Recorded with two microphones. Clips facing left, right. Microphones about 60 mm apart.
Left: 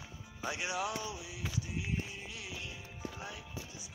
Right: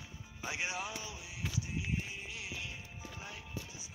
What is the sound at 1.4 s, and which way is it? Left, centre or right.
Music, centre.